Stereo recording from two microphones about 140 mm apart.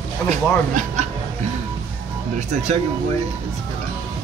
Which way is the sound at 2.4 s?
55° right (ahead or behind).